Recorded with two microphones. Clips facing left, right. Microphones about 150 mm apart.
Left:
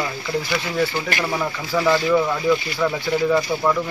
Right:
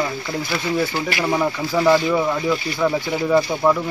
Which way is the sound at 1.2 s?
15° right (ahead or behind).